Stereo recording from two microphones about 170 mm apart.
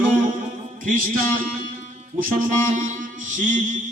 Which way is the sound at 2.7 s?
50° right (ahead or behind).